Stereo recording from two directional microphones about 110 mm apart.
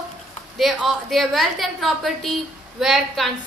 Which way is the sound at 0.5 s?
Centre (ahead or behind).